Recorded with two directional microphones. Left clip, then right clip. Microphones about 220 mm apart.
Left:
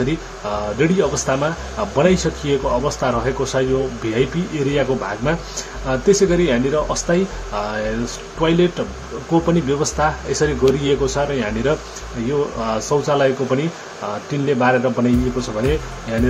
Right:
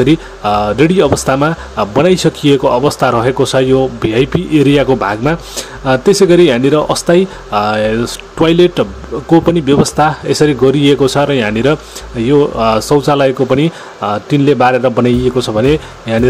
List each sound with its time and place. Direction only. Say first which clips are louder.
0.0 s speech: right 11 dB; 45° right (ahead or behind)